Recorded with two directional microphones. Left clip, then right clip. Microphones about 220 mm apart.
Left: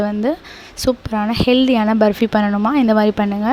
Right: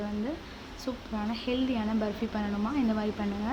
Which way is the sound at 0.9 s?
50° left (ahead or behind).